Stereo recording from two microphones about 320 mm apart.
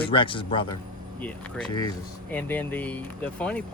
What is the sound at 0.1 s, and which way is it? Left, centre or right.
Speech, centre.